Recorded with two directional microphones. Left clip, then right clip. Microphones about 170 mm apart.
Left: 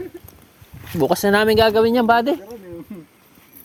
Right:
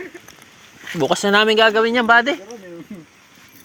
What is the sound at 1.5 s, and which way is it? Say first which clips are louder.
Speech: even; 45° left (ahead or behind).